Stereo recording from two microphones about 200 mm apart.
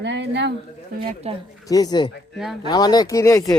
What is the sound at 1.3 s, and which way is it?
Speech, 30° right (ahead or behind).